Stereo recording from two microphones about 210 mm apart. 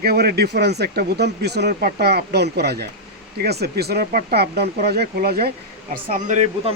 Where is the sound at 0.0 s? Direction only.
45° right (ahead or behind).